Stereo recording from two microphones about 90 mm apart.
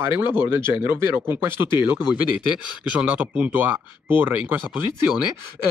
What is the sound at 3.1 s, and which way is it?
Speech, 20° right (ahead or behind).